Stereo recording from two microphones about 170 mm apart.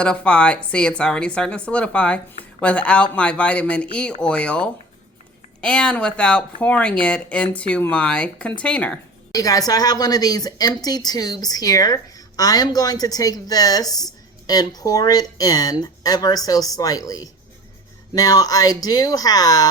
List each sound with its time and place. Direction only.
0.0 s speech: 5° left (ahead or behind)
9.3 s a woman's voice: 20° left (ahead or behind)